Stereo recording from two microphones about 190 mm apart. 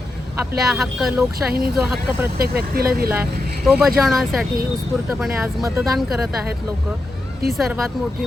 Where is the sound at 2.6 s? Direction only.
50° right (ahead or behind).